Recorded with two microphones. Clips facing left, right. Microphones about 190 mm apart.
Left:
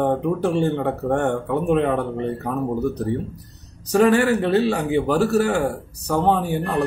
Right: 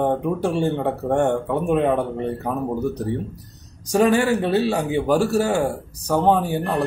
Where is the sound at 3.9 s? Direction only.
15° right (ahead or behind).